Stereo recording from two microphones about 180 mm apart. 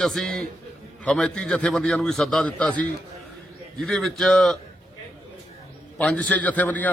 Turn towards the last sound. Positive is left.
turn(degrees=10)  # may be behind; listen again after turning